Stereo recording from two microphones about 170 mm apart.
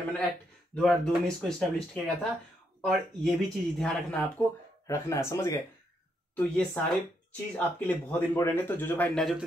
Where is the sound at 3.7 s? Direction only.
5° left (ahead or behind).